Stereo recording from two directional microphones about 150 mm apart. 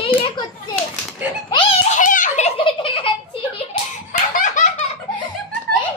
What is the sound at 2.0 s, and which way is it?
Giggle, 60° left (ahead or behind).